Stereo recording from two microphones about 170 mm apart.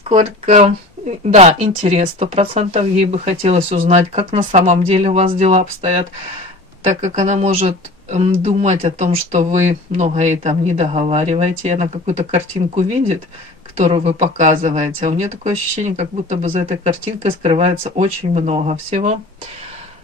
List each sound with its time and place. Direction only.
0.1 s speech: 45° right (ahead or behind)
7.0 s speech: 45° right (ahead or behind)